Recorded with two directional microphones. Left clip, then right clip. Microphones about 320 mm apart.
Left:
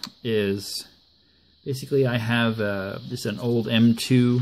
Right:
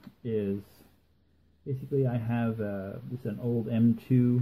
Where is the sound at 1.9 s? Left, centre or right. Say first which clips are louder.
Left 9 dB; left.